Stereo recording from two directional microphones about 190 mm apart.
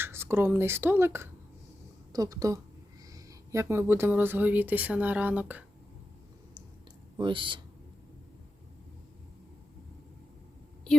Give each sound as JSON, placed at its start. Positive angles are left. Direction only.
{"t": 0.0, "sound": "speech", "side_deg": -10}
{"t": 7.2, "sound": "speech", "side_deg": -25}